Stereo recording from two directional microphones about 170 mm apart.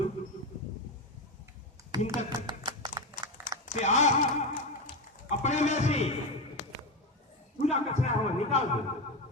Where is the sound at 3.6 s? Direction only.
45° left (ahead or behind).